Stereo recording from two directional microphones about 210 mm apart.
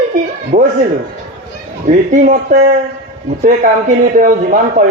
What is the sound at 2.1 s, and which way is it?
Speech, 40° right (ahead or behind).